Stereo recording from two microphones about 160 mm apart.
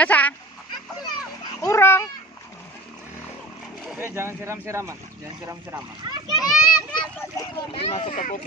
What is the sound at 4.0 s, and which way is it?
Speech, 15° right (ahead or behind).